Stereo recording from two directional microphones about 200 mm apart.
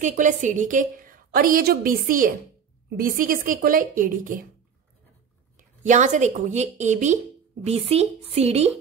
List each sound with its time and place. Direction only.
0.0 s a woman's voice: 40° right (ahead or behind)
5.6 s speech: 40° right (ahead or behind)